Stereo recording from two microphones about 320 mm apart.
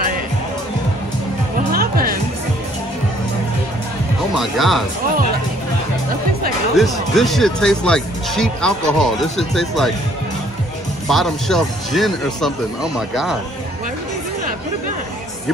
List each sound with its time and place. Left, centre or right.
1.7 s music: right
4.4 s speech: centre
6.8 s speech: centre
11.1 s speech: centre